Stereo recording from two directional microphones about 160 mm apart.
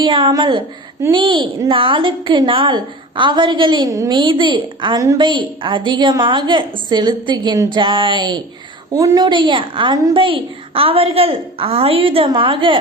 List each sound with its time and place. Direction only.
0.0 s a woman's voice: 30° right (ahead or behind)